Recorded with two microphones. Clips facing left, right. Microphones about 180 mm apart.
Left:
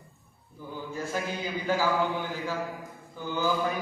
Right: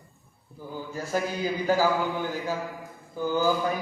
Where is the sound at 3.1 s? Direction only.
40° right (ahead or behind).